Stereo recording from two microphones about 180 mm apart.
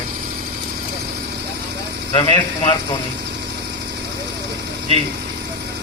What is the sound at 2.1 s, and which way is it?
Speech, 25° left (ahead or behind).